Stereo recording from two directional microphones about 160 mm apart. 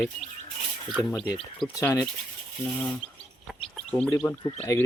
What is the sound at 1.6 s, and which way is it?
Speech, 15° left (ahead or behind).